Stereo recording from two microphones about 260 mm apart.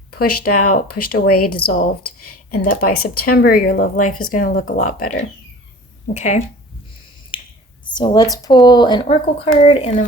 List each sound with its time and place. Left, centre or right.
0.1 s speech: left
0.4 s speech: left
0.7 s speech: left
6.1 s speech: left
7.3 s finger snapping: centre
7.9 s speech: centre